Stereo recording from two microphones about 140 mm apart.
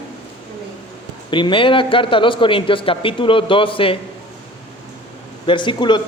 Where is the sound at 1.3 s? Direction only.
35° left (ahead or behind).